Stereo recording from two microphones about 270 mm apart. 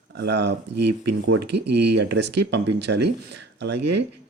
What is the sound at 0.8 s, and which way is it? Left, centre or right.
Speech, right.